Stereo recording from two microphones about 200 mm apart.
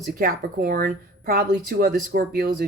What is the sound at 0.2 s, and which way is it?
Speech, 45° right (ahead or behind).